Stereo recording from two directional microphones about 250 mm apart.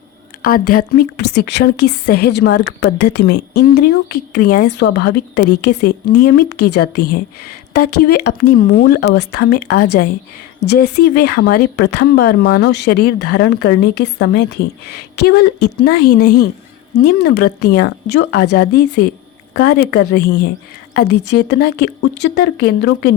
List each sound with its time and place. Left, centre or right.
0.4 s a woman's voice: left
16.2 s a woman's voice: left
16.9 s a woman's voice: left